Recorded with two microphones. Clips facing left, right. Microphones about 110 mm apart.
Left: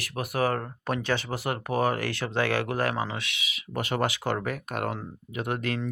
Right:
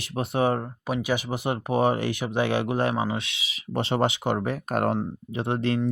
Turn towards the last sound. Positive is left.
turn(degrees=-30)  # may be behind; listen again after turning